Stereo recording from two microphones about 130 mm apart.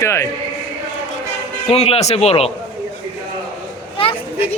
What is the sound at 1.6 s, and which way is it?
Speech, 50° left (ahead or behind).